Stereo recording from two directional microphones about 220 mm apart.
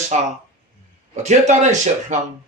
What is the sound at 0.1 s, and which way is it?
Speech, 30° right (ahead or behind).